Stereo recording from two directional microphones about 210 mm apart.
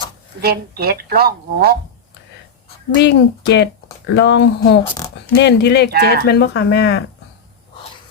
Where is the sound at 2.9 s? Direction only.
55° left (ahead or behind).